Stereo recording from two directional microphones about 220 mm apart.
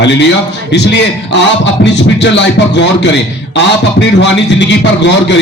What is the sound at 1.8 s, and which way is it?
Music, 55° left (ahead or behind).